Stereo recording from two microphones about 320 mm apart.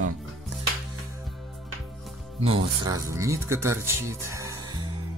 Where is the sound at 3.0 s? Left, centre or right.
Centre.